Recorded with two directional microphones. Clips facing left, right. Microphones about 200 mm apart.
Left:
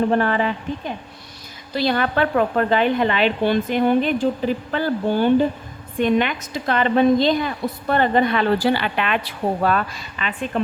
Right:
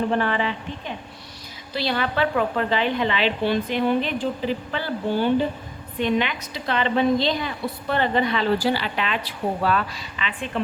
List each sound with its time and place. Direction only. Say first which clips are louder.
0.1 s a woman's voice: left 4 dB; 45° left (ahead or behind)